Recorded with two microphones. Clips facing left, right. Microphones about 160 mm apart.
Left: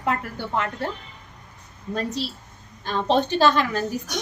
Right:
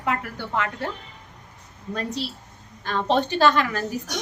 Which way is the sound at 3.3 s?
30° left (ahead or behind).